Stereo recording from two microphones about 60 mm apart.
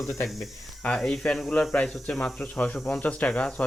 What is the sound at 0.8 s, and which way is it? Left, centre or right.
Speech, centre.